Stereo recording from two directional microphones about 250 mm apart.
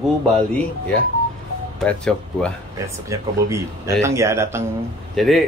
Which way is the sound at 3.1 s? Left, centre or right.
Centre.